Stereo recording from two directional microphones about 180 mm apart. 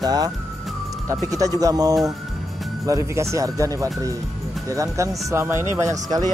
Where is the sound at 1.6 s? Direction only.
20° right (ahead or behind).